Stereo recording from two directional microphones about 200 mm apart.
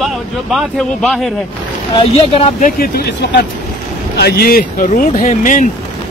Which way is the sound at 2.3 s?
30° left (ahead or behind).